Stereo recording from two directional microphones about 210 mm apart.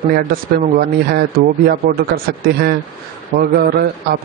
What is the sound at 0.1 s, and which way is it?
Speech, 45° right (ahead or behind).